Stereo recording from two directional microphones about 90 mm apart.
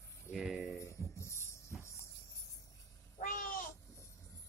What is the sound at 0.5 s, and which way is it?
Jingle bell, 15° right (ahead or behind).